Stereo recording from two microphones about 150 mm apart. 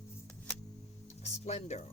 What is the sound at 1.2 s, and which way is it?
Music, 45° left (ahead or behind).